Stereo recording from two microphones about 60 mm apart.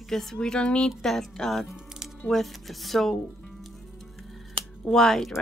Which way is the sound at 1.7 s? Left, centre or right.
Centre.